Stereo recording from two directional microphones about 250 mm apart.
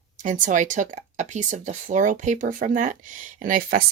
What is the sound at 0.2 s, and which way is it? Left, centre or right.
Speech, right.